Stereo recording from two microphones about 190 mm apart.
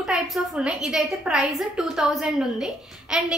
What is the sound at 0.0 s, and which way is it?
A woman's voice, centre (ahead or behind).